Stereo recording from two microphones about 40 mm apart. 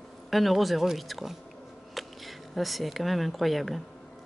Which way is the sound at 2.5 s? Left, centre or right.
Centre.